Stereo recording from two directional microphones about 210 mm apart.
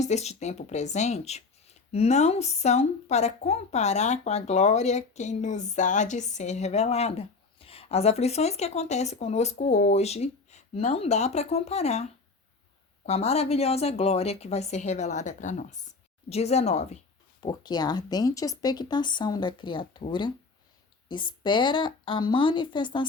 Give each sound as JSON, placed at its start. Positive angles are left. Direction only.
{"t": 0.0, "sound": "speech", "side_deg": 30}
{"t": 13.1, "sound": "speech", "side_deg": 30}
{"t": 17.4, "sound": "speech", "side_deg": 20}